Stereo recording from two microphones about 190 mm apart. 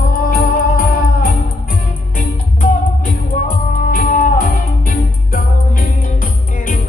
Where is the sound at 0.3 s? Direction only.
50° left (ahead or behind).